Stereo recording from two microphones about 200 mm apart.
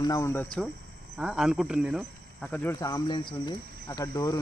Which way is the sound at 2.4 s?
10° left (ahead or behind).